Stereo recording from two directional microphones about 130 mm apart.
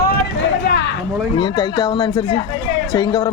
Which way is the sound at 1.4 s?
35° left (ahead or behind).